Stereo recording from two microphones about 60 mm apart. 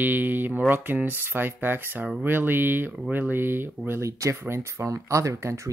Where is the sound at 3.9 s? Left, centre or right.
Right.